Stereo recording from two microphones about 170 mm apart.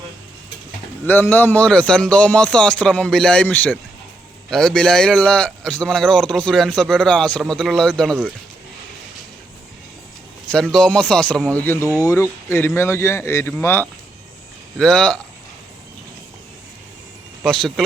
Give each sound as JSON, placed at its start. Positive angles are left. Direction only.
{"t": 1.0, "sound": "a man's voice", "side_deg": 10}
{"t": 10.5, "sound": "a man's voice", "side_deg": 5}
{"t": 17.4, "sound": "a man's voice", "side_deg": 0}